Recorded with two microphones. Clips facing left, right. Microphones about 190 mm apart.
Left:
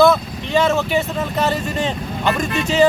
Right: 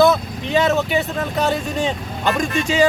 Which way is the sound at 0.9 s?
Centre (ahead or behind).